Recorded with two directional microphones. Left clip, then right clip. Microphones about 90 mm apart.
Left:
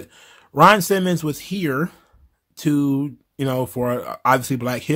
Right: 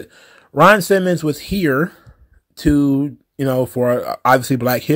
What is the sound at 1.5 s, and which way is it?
Speech, 30° right (ahead or behind).